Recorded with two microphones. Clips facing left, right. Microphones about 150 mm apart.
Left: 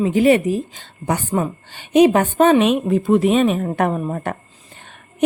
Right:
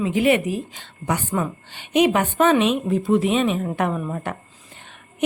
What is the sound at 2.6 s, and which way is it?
A woman's voice, 55° left (ahead or behind).